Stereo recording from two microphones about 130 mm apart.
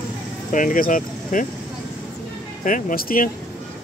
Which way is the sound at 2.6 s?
85° left.